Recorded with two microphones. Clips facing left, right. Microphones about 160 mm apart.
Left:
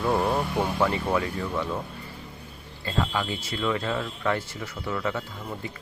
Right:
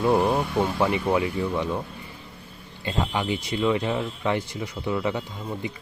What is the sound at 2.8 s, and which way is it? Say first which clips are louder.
Speech: right 1 dB; 20° right (ahead or behind).